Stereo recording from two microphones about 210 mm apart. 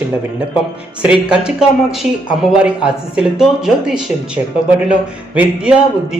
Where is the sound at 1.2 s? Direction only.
5° right (ahead or behind).